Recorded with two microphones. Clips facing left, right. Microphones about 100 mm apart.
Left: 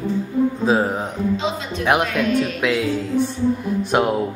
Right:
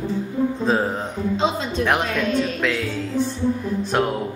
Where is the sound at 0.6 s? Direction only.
10° left (ahead or behind).